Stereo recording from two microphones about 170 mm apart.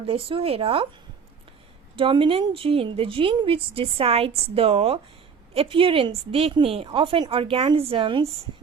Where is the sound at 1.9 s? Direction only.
30° right (ahead or behind).